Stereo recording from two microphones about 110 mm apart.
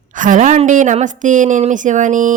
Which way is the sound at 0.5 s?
90° right.